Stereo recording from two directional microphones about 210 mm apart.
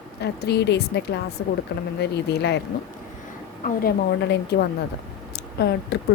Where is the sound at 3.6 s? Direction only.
45° left (ahead or behind).